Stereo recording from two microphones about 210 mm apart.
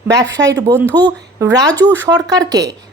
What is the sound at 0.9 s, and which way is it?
Speech, 10° left (ahead or behind).